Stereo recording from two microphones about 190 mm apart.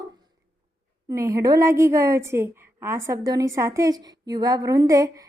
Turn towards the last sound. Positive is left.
turn(degrees=-20)  # may be behind; listen again after turning